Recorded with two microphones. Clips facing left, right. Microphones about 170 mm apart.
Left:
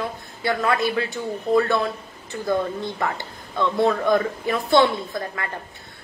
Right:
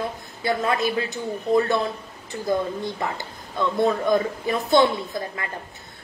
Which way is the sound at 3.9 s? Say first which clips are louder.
Left 1 dB; 20° right (ahead or behind).